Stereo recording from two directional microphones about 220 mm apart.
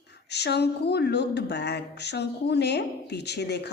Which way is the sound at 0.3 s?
50° left (ahead or behind).